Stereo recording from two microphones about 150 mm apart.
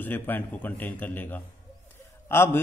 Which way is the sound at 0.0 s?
10° left (ahead or behind).